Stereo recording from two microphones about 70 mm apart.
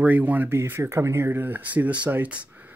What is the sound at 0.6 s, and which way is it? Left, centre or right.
Speech, right.